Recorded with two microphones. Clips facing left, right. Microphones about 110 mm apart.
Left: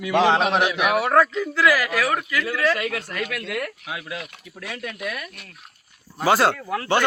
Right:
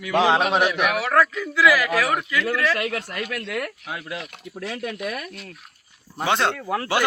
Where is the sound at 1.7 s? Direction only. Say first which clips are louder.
Right 2 dB; 25° right (ahead or behind).